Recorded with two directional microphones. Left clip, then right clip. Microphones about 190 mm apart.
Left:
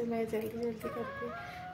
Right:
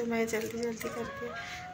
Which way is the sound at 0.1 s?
5° left (ahead or behind).